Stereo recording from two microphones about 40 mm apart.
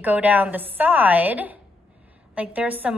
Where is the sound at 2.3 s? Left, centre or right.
Right.